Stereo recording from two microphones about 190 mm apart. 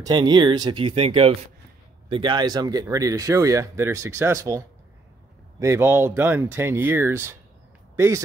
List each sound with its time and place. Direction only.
0.0 s speech: 20° right (ahead or behind)